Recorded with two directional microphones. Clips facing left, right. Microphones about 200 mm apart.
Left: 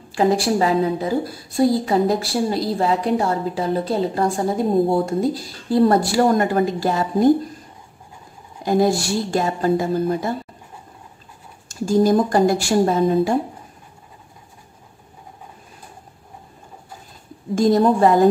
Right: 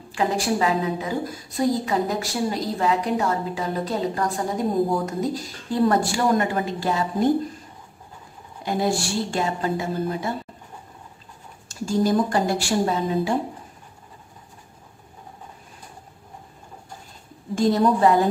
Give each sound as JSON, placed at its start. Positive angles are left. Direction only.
{"t": 0.1, "sound": "a woman's voice", "side_deg": 35}
{"t": 8.6, "sound": "a woman's voice", "side_deg": 40}
{"t": 11.7, "sound": "speech", "side_deg": 45}
{"t": 17.6, "sound": "speech", "side_deg": 45}